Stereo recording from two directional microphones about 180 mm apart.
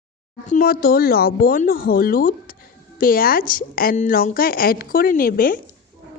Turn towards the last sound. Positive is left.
turn(degrees=50)  # may be behind; listen again after turning